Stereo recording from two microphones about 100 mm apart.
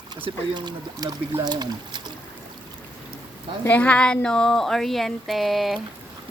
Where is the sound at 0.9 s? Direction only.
35° right (ahead or behind).